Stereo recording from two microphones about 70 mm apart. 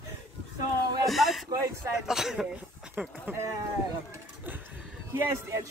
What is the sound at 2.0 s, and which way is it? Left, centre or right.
Speech, centre.